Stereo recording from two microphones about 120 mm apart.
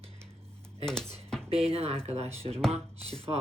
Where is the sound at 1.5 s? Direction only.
55° right (ahead or behind).